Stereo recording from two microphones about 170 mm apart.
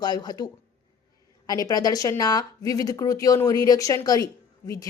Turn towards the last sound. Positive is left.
turn(degrees=20)  # may be behind; listen again after turning